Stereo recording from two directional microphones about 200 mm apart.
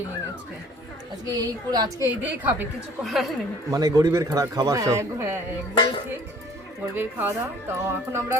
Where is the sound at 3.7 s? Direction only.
20° right (ahead or behind).